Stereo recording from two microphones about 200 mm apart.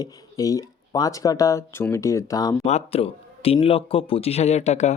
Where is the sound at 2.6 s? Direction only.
30° left (ahead or behind).